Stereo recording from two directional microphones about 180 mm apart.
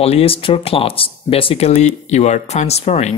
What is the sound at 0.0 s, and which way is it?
Speech, 35° left (ahead or behind).